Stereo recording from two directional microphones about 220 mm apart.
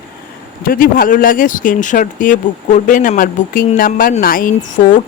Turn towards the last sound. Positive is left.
turn(degrees=35)  # may be behind; listen again after turning